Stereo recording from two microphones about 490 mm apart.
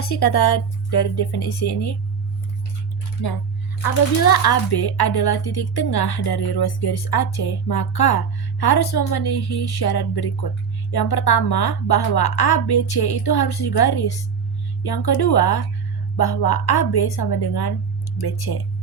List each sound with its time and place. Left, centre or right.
0.0 s a woman's voice: left
4.2 s a woman's voice: left